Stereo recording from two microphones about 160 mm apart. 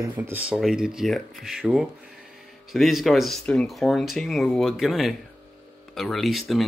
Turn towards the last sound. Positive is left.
turn(degrees=0)  # may be behind; listen again after turning